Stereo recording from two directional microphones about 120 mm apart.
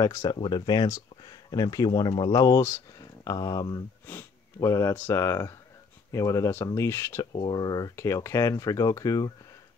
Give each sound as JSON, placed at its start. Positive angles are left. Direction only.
{"t": 0.0, "sound": "speech", "side_deg": 30}
{"t": 4.0, "sound": "sniff", "side_deg": 20}
{"t": 4.9, "sound": "speech", "side_deg": 20}
{"t": 7.3, "sound": "speech", "side_deg": 35}